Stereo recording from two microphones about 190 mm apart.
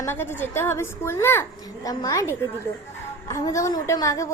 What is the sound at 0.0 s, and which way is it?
A woman's voice, 10° left (ahead or behind).